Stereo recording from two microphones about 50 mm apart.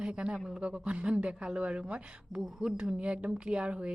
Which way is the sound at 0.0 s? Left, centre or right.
Right.